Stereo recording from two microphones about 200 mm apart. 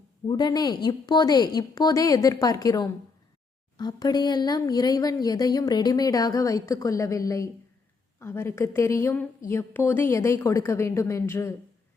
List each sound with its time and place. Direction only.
0.3 s a woman's voice: 20° left (ahead or behind)